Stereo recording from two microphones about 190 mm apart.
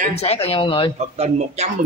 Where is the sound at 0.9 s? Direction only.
35° right (ahead or behind).